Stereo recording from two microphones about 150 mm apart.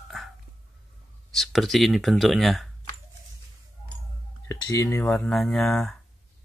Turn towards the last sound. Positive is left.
turn(degrees=0)  # may be behind; listen again after turning